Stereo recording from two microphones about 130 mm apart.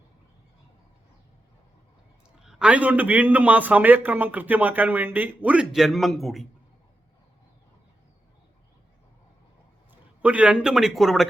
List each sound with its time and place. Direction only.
2.4 s a man's voice: 5° right (ahead or behind)
10.2 s speech: 10° right (ahead or behind)